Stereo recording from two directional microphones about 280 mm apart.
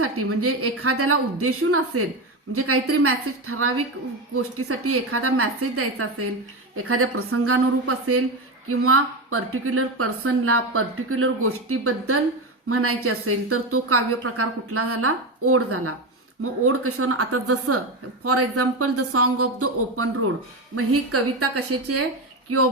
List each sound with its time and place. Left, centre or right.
0.0 s a woman's voice: right